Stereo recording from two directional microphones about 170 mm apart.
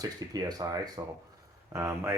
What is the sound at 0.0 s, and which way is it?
Speech, 20° right (ahead or behind).